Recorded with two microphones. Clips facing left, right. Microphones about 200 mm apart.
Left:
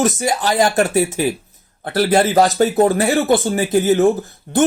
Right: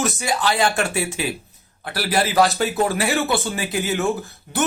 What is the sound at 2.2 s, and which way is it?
Speech, 45° left (ahead or behind).